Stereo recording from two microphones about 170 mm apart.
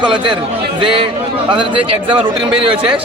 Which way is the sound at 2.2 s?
30° right (ahead or behind).